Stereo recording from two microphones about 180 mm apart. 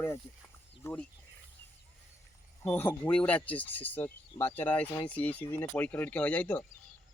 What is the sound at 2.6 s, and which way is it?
Speech, 10° left (ahead or behind).